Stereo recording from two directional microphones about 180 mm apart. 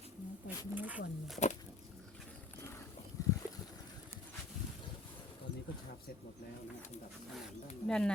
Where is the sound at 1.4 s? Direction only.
40° left (ahead or behind).